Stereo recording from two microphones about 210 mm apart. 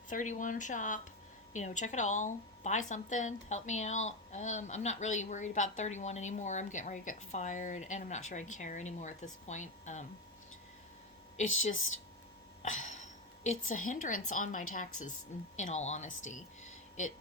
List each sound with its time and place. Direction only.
0.1 s a woman's voice: 40° left (ahead or behind)
11.4 s a woman's voice: 35° left (ahead or behind)
12.6 s a woman's voice: 35° left (ahead or behind)